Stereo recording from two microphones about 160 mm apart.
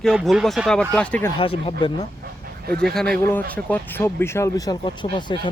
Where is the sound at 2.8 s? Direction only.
5° left (ahead or behind).